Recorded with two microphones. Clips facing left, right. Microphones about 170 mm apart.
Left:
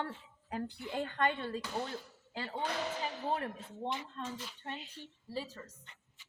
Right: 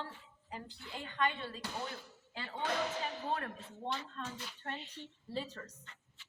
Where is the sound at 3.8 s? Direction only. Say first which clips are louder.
Left 2 dB; 20° left (ahead or behind).